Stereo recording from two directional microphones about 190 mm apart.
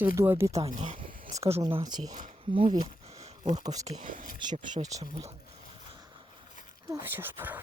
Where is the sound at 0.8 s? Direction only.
40° right (ahead or behind).